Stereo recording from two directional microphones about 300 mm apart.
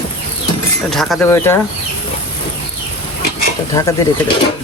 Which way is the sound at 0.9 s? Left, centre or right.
Centre.